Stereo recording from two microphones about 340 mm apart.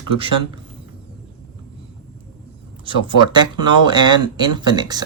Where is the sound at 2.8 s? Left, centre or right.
Centre.